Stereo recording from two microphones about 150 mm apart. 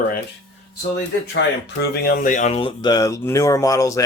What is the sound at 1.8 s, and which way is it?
Speech, 75° left (ahead or behind).